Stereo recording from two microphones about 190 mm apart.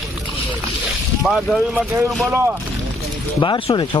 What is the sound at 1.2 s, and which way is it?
Speech, centre (ahead or behind).